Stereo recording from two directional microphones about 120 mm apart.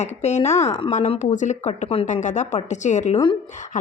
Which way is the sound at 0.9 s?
85° left.